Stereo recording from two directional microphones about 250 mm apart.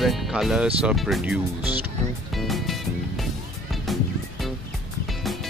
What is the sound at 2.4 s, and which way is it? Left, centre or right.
Music, centre.